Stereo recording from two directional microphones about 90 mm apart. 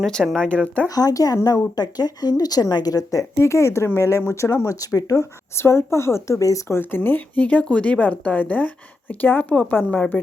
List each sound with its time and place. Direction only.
0.0 s speech: 5° left (ahead or behind)
0.9 s speech: 40° left (ahead or behind)
5.5 s speech: 30° left (ahead or behind)
6.7 s speech: 25° left (ahead or behind)